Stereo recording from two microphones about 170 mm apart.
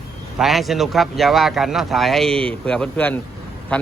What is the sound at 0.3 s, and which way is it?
Speech, centre (ahead or behind).